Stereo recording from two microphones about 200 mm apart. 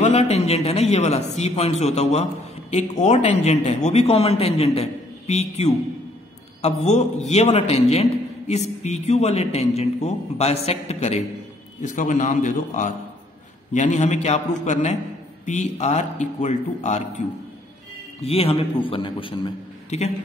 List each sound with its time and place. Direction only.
0.0 s a man's voice: 35° left (ahead or behind)
18.2 s a man's voice: 30° left (ahead or behind)